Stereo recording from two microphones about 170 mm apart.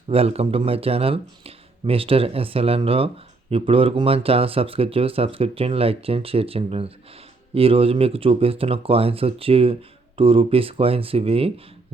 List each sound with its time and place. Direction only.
0.1 s speech: 35° right (ahead or behind)